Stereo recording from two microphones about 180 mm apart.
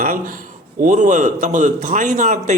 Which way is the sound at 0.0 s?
50° right (ahead or behind).